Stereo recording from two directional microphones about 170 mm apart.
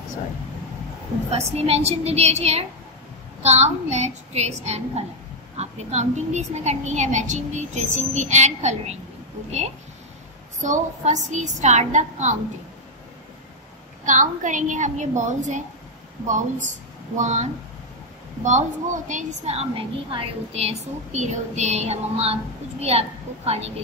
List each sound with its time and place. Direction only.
1.7 s a woman's voice: 35° right (ahead or behind)
10.6 s a woman's voice: 45° right (ahead or behind)
14.0 s a woman's voice: 50° right (ahead or behind)